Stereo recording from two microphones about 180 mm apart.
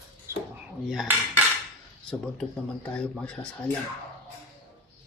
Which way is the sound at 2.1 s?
5° left (ahead or behind).